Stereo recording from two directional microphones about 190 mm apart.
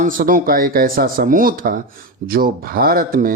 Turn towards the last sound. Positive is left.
turn(degrees=-45)  # may be behind; listen again after turning